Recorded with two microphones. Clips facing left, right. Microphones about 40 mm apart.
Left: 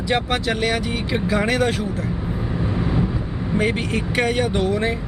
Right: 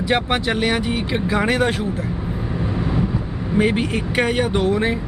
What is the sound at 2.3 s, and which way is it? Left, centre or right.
Vehicle, centre.